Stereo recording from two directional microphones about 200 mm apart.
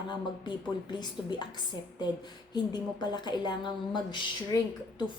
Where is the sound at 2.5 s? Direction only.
20° left (ahead or behind).